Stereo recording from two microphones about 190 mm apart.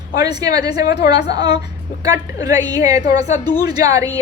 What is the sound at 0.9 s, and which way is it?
Speech, 60° left (ahead or behind).